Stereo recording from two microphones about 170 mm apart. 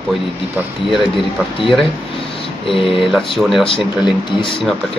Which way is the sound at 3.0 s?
Centre (ahead or behind).